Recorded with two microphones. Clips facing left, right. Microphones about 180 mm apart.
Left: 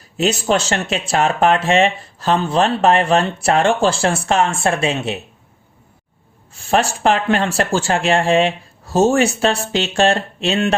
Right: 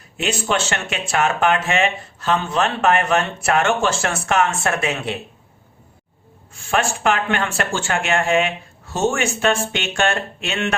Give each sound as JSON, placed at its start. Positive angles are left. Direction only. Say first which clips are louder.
{"t": 0.2, "sound": "speech", "louder": "left 5 dB", "side_deg": 35}
{"t": 6.5, "sound": "speech", "louder": "left 4 dB", "side_deg": 35}